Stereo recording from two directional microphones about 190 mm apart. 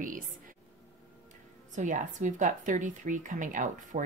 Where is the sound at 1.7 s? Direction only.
40° right (ahead or behind).